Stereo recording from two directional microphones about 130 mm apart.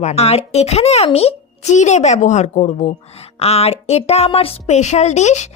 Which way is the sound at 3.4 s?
50° left (ahead or behind).